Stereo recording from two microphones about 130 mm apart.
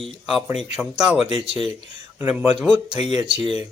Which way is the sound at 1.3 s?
50° left (ahead or behind).